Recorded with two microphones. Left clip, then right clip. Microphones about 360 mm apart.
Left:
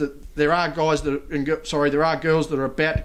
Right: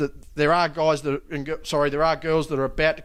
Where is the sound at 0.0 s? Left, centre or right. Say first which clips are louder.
Left 1 dB; right.